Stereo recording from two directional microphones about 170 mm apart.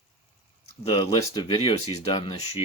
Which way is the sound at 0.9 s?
25° left (ahead or behind).